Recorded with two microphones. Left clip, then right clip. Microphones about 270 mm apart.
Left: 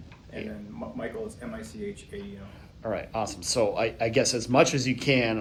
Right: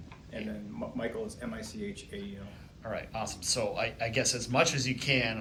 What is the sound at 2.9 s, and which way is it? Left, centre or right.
A man's voice, left.